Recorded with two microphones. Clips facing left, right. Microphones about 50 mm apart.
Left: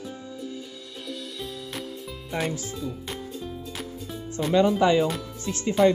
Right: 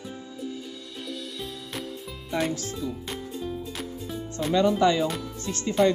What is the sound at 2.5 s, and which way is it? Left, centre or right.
Speech, centre.